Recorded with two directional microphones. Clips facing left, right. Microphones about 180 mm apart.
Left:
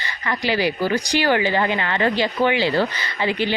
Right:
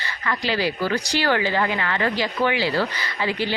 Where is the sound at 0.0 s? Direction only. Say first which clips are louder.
Left 2 dB; 15° left (ahead or behind).